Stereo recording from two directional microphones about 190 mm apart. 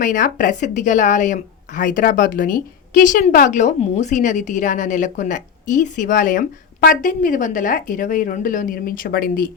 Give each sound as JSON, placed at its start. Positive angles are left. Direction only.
{"t": 0.0, "sound": "a woman's voice", "side_deg": 45}